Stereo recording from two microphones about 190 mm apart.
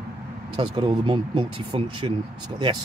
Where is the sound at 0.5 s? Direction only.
25° right (ahead or behind).